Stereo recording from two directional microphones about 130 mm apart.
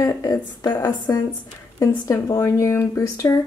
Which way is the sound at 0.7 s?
15° left (ahead or behind).